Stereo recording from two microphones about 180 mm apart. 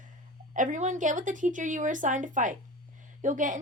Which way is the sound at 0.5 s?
45° right (ahead or behind).